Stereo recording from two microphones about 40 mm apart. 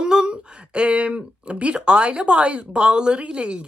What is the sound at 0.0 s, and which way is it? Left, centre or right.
Speech, centre.